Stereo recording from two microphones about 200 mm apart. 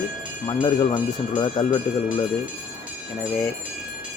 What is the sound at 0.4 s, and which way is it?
Speech, 20° left (ahead or behind).